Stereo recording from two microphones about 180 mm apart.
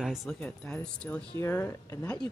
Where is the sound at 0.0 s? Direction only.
Centre (ahead or behind).